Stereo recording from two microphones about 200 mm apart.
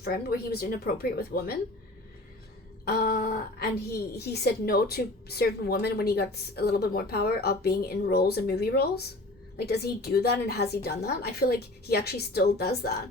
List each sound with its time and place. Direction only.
0.0 s a woman's voice: 50° left (ahead or behind)
2.8 s a woman's voice: 50° left (ahead or behind)